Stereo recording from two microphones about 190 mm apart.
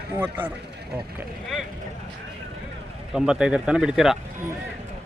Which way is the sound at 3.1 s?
5° right (ahead or behind).